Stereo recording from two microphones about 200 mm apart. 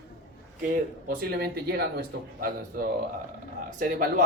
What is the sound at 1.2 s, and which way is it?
Speech, 50° right (ahead or behind).